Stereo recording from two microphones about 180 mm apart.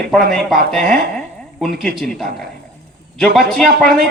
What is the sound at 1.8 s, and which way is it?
Speech, centre (ahead or behind).